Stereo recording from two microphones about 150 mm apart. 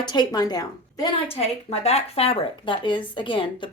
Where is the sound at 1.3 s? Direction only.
40° left (ahead or behind).